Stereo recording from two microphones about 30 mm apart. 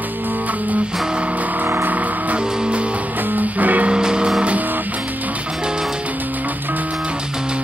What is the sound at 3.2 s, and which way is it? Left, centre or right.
Music, right.